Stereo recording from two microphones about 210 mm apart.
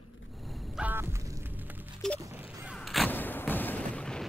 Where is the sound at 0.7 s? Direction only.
10° right (ahead or behind).